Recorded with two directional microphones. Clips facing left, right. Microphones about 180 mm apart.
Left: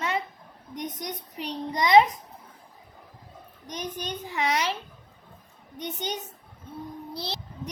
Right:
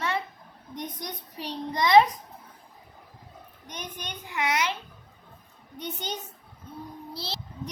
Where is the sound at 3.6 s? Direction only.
35° left (ahead or behind).